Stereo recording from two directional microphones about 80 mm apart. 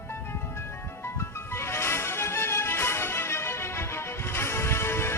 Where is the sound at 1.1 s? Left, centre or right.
Left.